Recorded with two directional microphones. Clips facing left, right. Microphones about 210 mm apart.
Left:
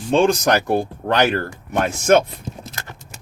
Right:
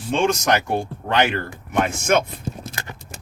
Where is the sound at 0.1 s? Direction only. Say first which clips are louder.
Left 4 dB; 35° left (ahead or behind).